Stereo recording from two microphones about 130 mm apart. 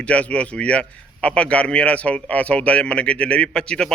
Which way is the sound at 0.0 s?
10° left (ahead or behind).